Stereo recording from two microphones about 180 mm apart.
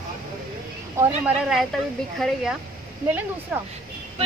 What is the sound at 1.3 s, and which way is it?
A woman's voice, 5° right (ahead or behind).